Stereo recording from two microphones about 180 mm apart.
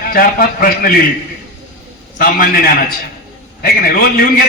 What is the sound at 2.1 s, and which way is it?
A man's voice, 50° left (ahead or behind).